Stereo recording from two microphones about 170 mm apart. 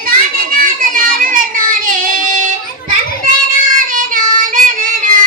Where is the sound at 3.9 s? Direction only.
50° right (ahead or behind).